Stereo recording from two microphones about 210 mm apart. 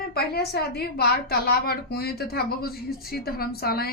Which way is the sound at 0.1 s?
50° left (ahead or behind).